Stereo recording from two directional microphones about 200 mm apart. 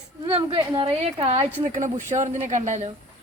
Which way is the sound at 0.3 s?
25° right (ahead or behind).